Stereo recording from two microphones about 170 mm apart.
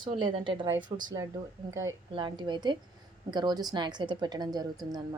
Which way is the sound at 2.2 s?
25° right (ahead or behind).